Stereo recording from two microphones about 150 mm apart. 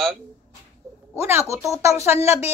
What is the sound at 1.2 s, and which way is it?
A woman's voice, 15° right (ahead or behind).